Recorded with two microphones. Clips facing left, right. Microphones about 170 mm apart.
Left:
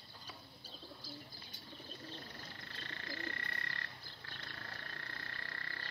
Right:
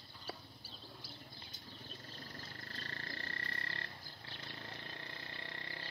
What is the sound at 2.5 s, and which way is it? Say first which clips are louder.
Wild animals: right 2 dB; 40° right (ahead or behind).